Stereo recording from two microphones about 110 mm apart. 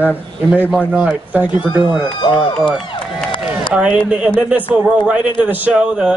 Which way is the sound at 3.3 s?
50° left (ahead or behind).